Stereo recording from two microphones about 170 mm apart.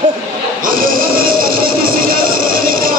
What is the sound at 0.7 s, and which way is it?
Music, 55° right (ahead or behind).